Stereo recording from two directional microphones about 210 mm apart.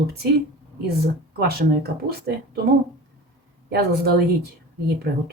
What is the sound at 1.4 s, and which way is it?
Speech, 45° right (ahead or behind).